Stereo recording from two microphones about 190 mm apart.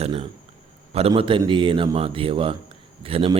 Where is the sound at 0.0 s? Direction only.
30° right (ahead or behind).